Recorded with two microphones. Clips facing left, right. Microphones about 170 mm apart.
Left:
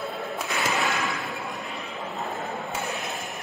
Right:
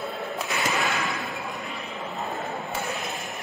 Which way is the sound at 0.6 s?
Centre (ahead or behind).